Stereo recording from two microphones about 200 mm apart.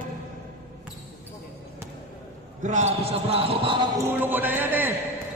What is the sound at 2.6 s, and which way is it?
Speech, 35° right (ahead or behind).